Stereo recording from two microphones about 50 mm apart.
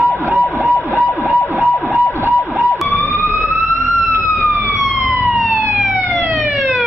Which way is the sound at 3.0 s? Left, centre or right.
Right.